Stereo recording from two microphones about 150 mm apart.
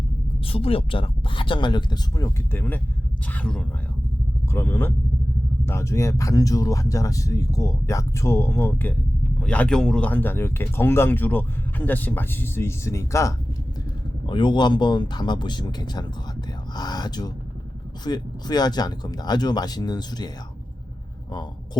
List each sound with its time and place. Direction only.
0.4 s speech: 40° left (ahead or behind); by 13.3 s 20° left (ahead or behind)
14.3 s speech: 30° left (ahead or behind)